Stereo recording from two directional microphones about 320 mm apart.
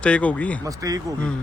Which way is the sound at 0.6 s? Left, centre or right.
Centre.